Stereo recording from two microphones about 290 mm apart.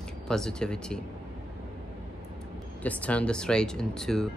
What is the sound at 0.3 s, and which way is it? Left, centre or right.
Speech, centre.